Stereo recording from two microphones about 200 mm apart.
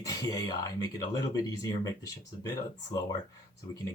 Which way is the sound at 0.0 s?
15° left (ahead or behind).